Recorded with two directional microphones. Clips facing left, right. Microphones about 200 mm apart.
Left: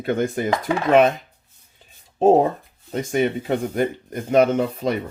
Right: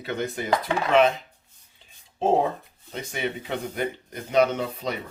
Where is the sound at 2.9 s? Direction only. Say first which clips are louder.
Left 9 dB; 45° left (ahead or behind).